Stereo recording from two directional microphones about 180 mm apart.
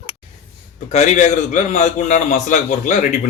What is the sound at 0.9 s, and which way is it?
A man's voice, 40° left (ahead or behind).